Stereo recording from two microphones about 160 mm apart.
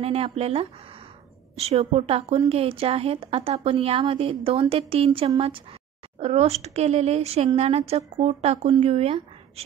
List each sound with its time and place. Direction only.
0.0 s speech: 40° right (ahead or behind)